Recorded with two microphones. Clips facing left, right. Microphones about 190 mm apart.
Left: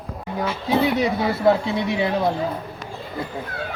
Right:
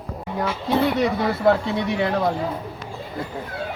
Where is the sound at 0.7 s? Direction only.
5° left (ahead or behind).